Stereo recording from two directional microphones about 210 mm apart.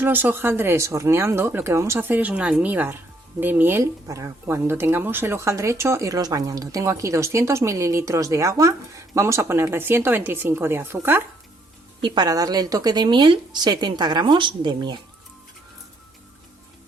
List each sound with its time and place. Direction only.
0.0 s a woman's voice: 10° right (ahead or behind)